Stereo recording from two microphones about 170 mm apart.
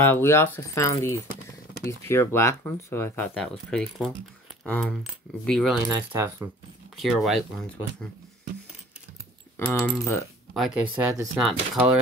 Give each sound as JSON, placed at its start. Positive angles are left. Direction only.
{"t": 0.0, "sound": "speech", "side_deg": 15}
{"t": 5.9, "sound": "speech", "side_deg": -15}
{"t": 7.0, "sound": "speech", "side_deg": 0}
{"t": 9.7, "sound": "speech", "side_deg": 15}
{"t": 10.5, "sound": "speech", "side_deg": -5}